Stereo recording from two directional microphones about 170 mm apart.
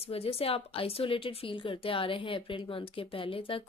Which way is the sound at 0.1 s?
35° left (ahead or behind).